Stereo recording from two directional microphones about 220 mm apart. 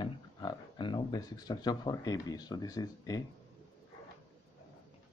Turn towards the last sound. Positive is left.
turn(degrees=15)  # may be behind; listen again after turning